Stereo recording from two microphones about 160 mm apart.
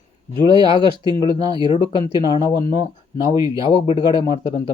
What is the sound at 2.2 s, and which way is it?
Speech, 30° left (ahead or behind).